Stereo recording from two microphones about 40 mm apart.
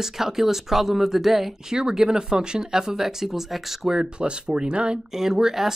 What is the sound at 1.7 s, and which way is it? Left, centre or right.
Speech, centre.